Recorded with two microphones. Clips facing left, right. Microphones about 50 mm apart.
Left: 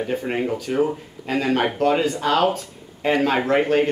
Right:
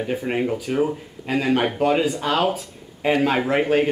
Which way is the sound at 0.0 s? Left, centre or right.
Centre.